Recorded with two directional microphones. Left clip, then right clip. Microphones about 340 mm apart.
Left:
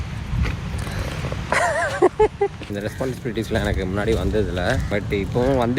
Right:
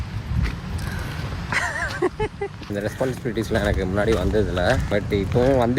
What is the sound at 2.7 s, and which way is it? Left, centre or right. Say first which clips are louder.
Speech: right 2 dB; centre.